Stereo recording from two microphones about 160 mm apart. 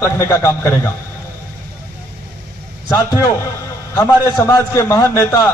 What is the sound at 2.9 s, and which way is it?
A man's voice, 20° left (ahead or behind).